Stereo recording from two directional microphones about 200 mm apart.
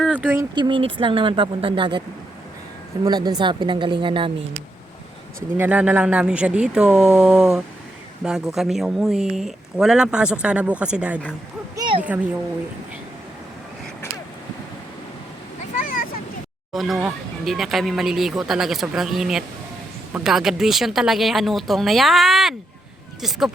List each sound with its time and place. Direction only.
0.0 s speech: 5° right (ahead or behind)
0.5 s speech: 25° right (ahead or behind)
5.5 s speech: 5° right (ahead or behind)
11.8 s a sound: 25° right (ahead or behind)
15.7 s a sound: 40° left (ahead or behind)
16.7 s speech: centre (ahead or behind)